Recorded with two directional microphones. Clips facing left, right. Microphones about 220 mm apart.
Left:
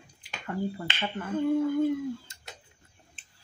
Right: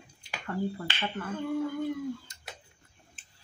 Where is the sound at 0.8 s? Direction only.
20° left (ahead or behind).